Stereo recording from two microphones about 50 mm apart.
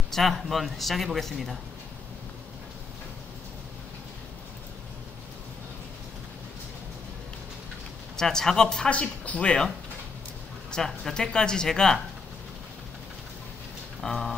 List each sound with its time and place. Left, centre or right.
0.1 s speech: centre
8.2 s speech: centre
8.9 s speech: left
10.7 s speech: centre
14.0 s speech: centre